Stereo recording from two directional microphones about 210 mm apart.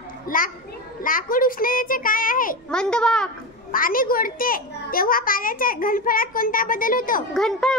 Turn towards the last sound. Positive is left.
turn(degrees=5)  # may be behind; listen again after turning